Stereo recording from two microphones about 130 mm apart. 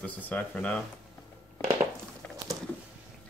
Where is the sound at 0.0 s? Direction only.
10° left (ahead or behind).